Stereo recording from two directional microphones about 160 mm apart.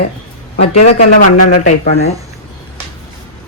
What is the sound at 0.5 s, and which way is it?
Speech, 40° left (ahead or behind).